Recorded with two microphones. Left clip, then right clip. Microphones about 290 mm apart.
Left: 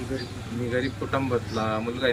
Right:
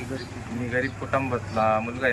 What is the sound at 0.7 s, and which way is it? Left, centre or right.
Speech, centre.